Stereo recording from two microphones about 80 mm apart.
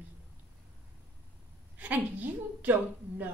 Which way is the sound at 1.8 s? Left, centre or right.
Centre.